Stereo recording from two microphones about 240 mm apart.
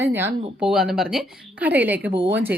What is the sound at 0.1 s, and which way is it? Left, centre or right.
A woman's voice, centre.